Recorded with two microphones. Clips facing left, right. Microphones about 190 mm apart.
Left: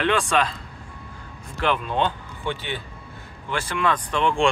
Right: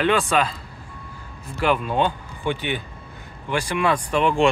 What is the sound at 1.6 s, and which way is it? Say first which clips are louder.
Speech: right 2 dB; 10° right (ahead or behind).